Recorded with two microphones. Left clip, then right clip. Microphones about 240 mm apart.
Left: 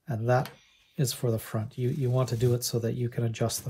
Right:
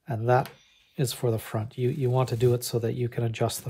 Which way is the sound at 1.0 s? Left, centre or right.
Right.